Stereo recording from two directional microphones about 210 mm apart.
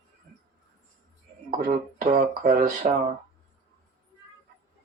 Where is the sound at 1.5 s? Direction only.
40° right (ahead or behind).